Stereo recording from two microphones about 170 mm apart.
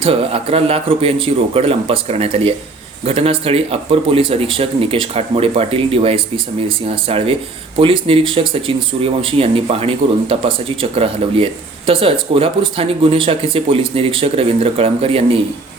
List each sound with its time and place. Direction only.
0.0 s speech: 35° right (ahead or behind)